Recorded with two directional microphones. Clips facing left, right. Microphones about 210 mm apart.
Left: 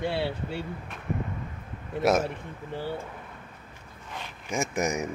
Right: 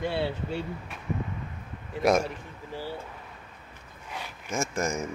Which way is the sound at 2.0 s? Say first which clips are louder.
Even; 5° left (ahead or behind).